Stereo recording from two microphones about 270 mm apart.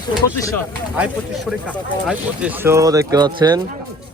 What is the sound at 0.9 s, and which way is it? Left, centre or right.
Speech, centre.